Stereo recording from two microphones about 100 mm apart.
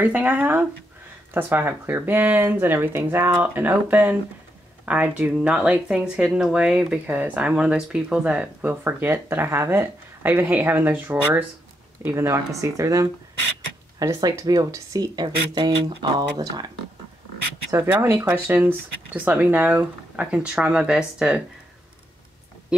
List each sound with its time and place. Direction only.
0.0 s speech: 15° right (ahead or behind); by 16.7 s 45° right (ahead or behind)
17.6 s speech: 25° right (ahead or behind); by 21.4 s 5° right (ahead or behind)
22.7 s a sound: 5° right (ahead or behind)